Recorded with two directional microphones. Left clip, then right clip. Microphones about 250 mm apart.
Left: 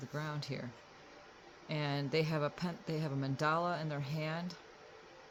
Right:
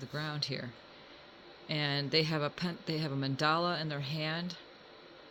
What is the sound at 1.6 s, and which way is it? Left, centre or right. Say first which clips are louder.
Speech: right 4 dB; right.